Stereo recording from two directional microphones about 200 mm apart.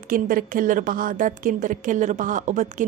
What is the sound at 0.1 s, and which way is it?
A woman's voice, 45° right (ahead or behind).